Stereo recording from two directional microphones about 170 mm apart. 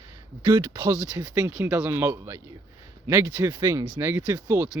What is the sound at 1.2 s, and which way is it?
Speech, 20° right (ahead or behind).